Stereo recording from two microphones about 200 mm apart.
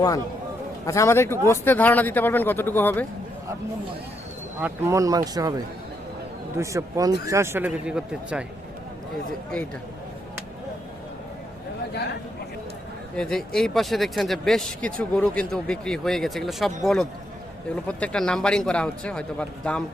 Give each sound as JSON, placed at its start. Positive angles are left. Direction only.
{"t": 0.9, "sound": "speech", "side_deg": 15}
{"t": 4.6, "sound": "speech", "side_deg": -15}
{"t": 6.6, "sound": "speech", "side_deg": -15}
{"t": 13.1, "sound": "speech", "side_deg": 5}